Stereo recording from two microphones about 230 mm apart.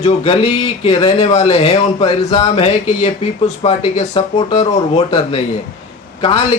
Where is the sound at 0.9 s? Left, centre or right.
Left.